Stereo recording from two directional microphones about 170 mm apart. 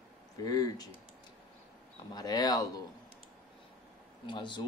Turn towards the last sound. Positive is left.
turn(degrees=25)  # may be behind; listen again after turning